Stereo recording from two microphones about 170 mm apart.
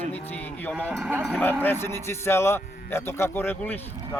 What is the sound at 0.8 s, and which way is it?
Speech, 10° right (ahead or behind).